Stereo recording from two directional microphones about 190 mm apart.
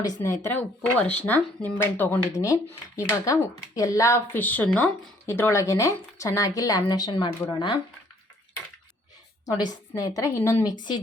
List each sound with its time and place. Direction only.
0.0 s speech: 15° left (ahead or behind)
9.6 s speech: 20° left (ahead or behind)